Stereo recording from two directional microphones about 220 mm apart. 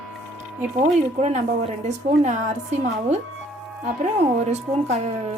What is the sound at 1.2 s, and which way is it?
A woman's voice, 30° right (ahead or behind).